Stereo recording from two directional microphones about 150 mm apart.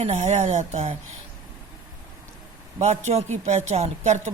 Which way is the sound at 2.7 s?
50° right (ahead or behind).